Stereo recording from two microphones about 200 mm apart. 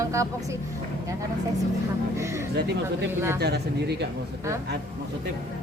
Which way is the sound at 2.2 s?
15° right (ahead or behind).